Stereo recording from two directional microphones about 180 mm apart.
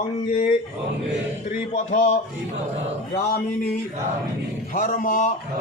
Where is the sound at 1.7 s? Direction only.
40° left (ahead or behind).